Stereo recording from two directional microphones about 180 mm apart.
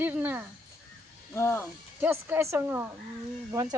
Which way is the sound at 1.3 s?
15° left (ahead or behind).